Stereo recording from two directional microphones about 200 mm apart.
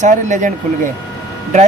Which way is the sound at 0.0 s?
35° right (ahead or behind).